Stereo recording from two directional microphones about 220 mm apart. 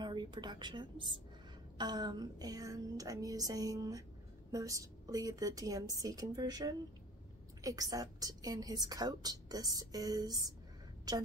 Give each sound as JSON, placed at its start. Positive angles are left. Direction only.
{"t": 0.0, "sound": "a woman's voice", "side_deg": -20}